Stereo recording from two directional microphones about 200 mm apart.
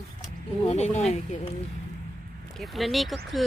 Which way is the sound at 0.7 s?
35° left (ahead or behind).